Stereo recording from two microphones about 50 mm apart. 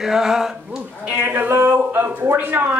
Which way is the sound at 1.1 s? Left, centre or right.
Right.